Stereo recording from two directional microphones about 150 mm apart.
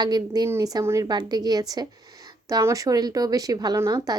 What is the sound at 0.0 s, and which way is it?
Speech, 25° right (ahead or behind).